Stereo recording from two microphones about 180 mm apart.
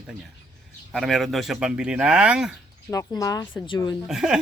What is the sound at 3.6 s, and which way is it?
Speech, 25° left (ahead or behind).